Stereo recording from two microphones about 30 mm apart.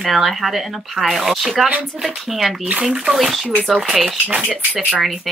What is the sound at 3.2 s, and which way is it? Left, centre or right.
Speech, centre.